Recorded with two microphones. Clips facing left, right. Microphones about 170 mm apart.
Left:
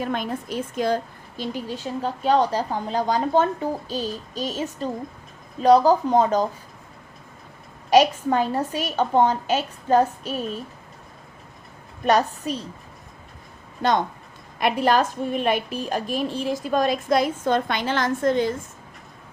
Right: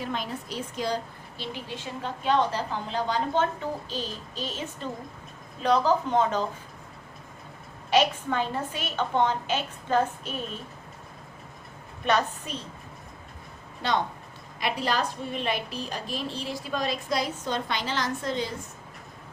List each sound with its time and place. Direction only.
0.0 s a woman's voice: 50° left (ahead or behind)
7.9 s a woman's voice: 40° left (ahead or behind)
12.0 s a woman's voice: 40° left (ahead or behind)
14.6 s a woman's voice: 50° left (ahead or behind)